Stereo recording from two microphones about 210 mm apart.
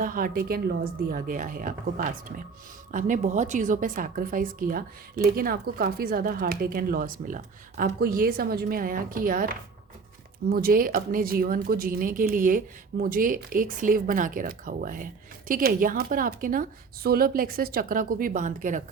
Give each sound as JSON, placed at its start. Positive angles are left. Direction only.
{"t": 0.0, "sound": "a woman's voice", "side_deg": -40}